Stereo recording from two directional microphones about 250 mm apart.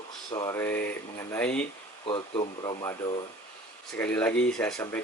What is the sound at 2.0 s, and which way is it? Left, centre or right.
Speech, centre.